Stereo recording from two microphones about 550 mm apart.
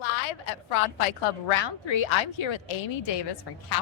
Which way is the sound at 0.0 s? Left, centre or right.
Left.